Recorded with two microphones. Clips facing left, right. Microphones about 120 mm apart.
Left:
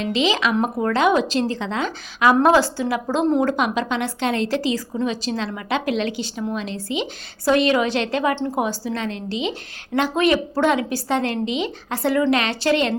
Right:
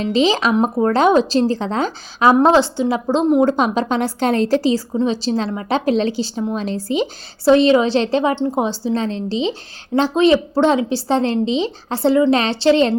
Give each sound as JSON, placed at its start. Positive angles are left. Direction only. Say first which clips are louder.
{"t": 0.0, "sound": "a woman's voice", "louder": "right 4 dB", "side_deg": -35}
{"t": 2.3, "sound": "a woman's voice", "louder": "right 2 dB", "side_deg": -25}
{"t": 3.5, "sound": "a woman's voice", "louder": "right 4 dB", "side_deg": -35}